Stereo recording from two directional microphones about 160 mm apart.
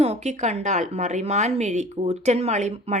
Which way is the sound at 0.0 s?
45° right (ahead or behind).